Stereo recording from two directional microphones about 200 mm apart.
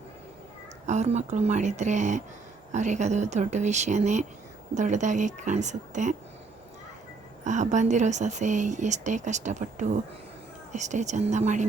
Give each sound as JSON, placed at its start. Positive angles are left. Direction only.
{"t": 0.9, "sound": "speech", "side_deg": -35}
{"t": 7.4, "sound": "speech", "side_deg": -35}